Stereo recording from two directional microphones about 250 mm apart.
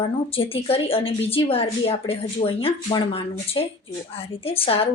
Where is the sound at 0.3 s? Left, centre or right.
Left.